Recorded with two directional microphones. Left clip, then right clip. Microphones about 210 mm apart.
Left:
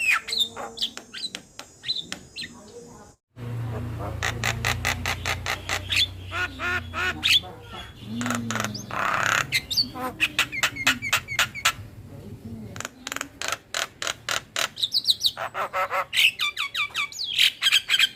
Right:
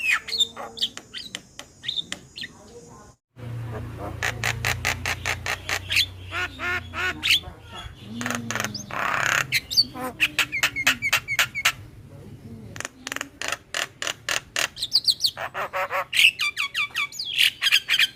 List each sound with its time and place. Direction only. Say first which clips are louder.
0.0 s bird: even; 5° right (ahead or behind)
4.0 s a sound: right 1 dB; 10° right (ahead or behind)
8.2 s bird: even; 10° right (ahead or behind)
12.7 s mechanisms: right 1 dB; 10° right (ahead or behind)
15.0 s bird: even; 10° right (ahead or behind)